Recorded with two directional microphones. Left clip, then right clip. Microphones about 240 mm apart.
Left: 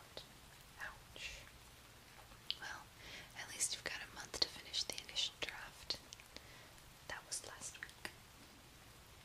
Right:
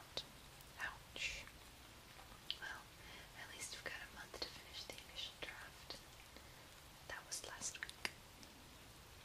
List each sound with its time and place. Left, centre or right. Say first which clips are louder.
0.2 s whispering: right 6 dB; centre
2.5 s whispering: left 2 dB; centre
7.1 s whispering: left 1 dB; centre